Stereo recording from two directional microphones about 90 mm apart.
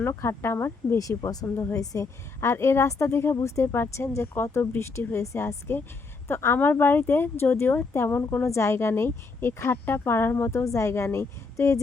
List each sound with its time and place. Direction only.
0.1 s speech: 30° left (ahead or behind)
0.9 s a woman's voice: 40° left (ahead or behind)
1.5 s speech: 25° left (ahead or behind)
1.8 s a woman's voice: 40° left (ahead or behind); by 8.4 s 20° left (ahead or behind)
8.4 s speech: 30° left (ahead or behind)
10.6 s a woman's voice: 35° left (ahead or behind)